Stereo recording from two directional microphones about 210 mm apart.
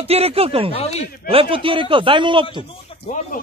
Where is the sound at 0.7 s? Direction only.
30° left (ahead or behind).